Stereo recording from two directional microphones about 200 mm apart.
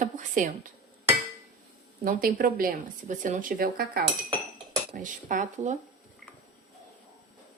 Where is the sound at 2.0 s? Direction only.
45° right (ahead or behind).